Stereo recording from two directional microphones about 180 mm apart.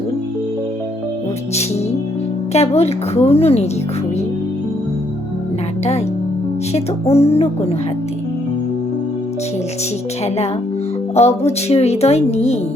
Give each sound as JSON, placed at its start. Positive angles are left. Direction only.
{"t": 2.5, "sound": "speech", "side_deg": 35}
{"t": 6.7, "sound": "speech", "side_deg": 35}
{"t": 11.1, "sound": "speech", "side_deg": 35}